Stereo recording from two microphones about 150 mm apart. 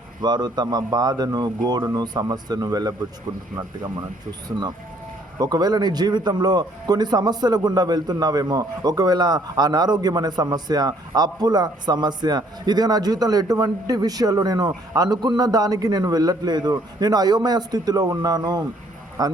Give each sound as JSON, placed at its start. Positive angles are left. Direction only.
{"t": 0.2, "sound": "a man's voice", "side_deg": -30}
{"t": 5.4, "sound": "a man's voice", "side_deg": -25}